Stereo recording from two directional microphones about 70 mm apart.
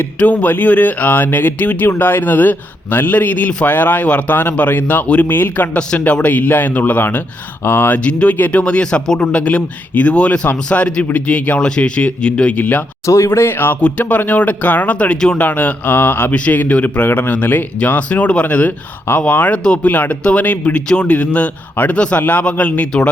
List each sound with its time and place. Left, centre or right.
0.2 s speech: left
5.7 s speech: centre; by 7.9 s left
7.9 s speech: centre
13.1 s speech: left
13.8 s speech: left
19.9 s speech: left